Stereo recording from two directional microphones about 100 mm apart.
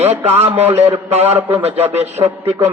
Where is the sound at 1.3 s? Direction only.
20° right (ahead or behind).